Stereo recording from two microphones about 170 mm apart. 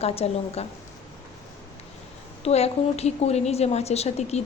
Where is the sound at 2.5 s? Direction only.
40° left (ahead or behind).